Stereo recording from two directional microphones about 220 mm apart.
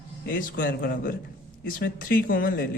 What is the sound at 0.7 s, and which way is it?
Speech, 40° left (ahead or behind).